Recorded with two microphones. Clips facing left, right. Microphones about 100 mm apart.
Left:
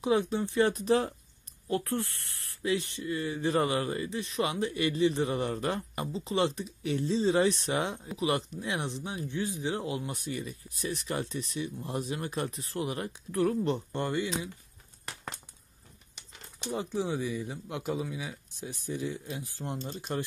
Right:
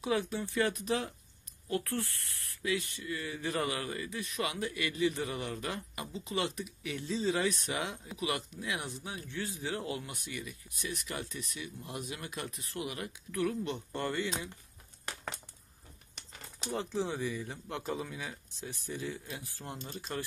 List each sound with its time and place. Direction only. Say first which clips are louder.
0.0 s speech: left 5 dB; 20° left (ahead or behind)
1.7 s speech: left 4 dB; 25° left (ahead or behind)
10.0 s speech: left 7 dB; 35° left (ahead or behind)
13.9 s speech: left 3 dB; 20° left (ahead or behind)
16.7 s speech: left 3 dB; 15° left (ahead or behind)